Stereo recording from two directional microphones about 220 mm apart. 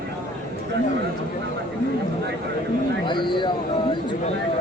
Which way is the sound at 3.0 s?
20° left (ahead or behind).